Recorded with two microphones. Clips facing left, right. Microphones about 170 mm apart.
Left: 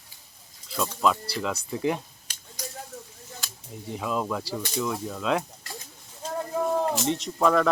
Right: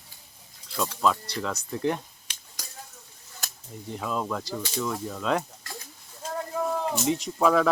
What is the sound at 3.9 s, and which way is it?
Speech, 5° left (ahead or behind).